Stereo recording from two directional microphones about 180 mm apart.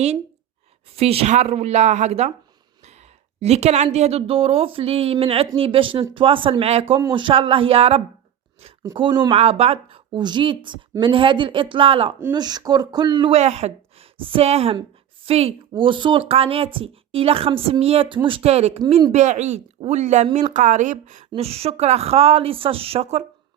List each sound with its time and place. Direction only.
0.9 s speech: 35° right (ahead or behind)
3.4 s speech: 35° right (ahead or behind)